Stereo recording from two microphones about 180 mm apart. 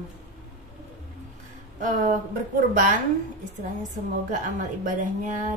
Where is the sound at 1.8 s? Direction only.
45° right (ahead or behind).